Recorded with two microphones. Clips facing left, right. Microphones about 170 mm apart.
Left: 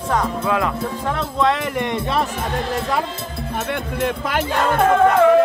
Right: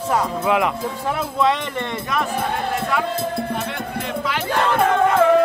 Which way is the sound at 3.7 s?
55° left (ahead or behind).